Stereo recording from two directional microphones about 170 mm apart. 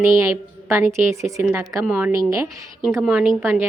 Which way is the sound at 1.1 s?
15° right (ahead or behind).